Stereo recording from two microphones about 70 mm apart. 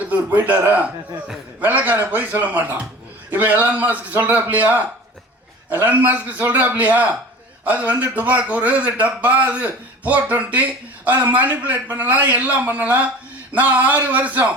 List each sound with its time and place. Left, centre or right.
0.1 s speech: right